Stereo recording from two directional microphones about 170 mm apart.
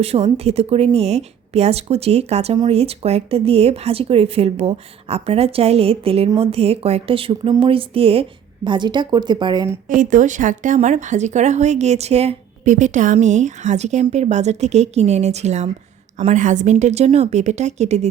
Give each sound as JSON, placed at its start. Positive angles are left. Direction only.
{"t": 0.0, "sound": "a woman's voice", "side_deg": -35}
{"t": 9.9, "sound": "a woman's voice", "side_deg": -50}